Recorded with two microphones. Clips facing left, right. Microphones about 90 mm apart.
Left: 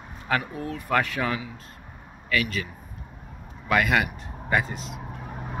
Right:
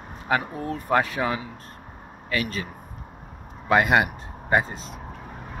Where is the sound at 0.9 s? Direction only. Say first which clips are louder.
Right 2 dB; 25° right (ahead or behind).